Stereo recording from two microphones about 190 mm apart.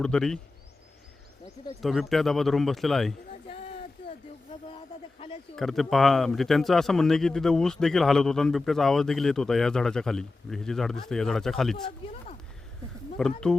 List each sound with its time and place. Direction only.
0.0 s a man's voice: 5° left (ahead or behind)
1.8 s a man's voice: centre (ahead or behind)
3.5 s a sound: 30° left (ahead or behind)
5.5 s a man's voice: centre (ahead or behind)
12.0 s a woman's voice: 30° left (ahead or behind)
13.1 s a man's voice: 5° left (ahead or behind)